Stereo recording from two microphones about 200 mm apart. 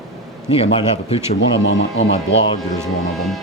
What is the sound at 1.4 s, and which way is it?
Speech, 65° left (ahead or behind).